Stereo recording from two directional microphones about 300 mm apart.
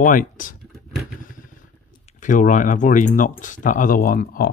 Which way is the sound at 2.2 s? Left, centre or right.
Left.